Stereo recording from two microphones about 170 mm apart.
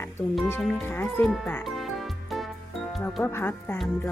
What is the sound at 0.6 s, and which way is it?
Music, centre (ahead or behind).